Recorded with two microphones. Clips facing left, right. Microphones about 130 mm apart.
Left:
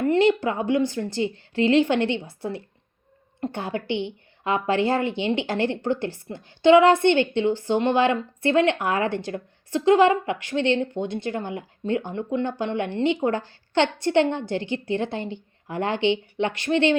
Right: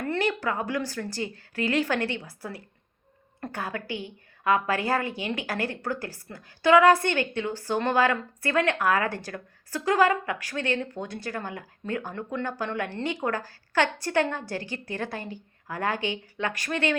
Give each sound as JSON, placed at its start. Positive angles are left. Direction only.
{"t": 0.0, "sound": "a woman's voice", "side_deg": 20}